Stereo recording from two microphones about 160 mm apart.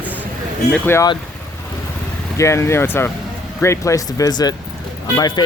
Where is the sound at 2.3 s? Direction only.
15° left (ahead or behind).